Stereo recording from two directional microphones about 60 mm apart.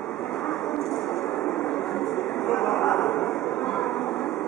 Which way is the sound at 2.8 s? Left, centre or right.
Centre.